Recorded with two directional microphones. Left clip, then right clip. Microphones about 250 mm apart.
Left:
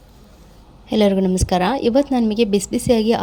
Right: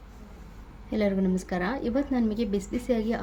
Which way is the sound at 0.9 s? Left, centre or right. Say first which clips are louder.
Left 11 dB; left.